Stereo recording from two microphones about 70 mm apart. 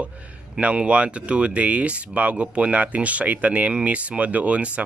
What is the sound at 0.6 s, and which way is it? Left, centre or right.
Speech, centre.